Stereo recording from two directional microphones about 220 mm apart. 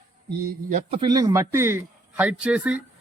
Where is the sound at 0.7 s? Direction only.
30° right (ahead or behind).